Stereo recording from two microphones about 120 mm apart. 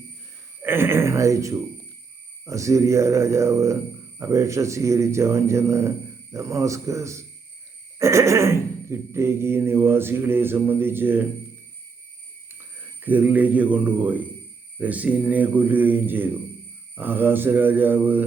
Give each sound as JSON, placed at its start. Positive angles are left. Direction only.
{"t": 0.6, "sound": "speech", "side_deg": -20}
{"t": 13.0, "sound": "speech", "side_deg": -15}